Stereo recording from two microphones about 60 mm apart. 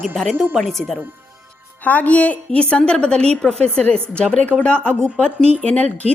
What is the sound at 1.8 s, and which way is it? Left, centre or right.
A woman's voice, left.